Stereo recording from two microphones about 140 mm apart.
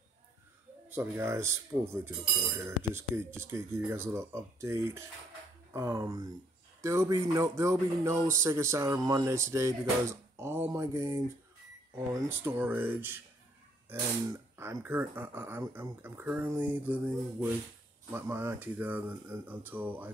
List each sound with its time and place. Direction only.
0.8 s speech: 15° right (ahead or behind)